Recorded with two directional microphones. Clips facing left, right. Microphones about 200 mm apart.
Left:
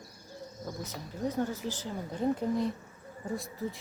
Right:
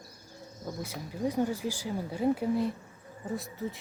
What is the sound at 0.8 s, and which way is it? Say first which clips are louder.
Speech: right 2 dB; 10° right (ahead or behind).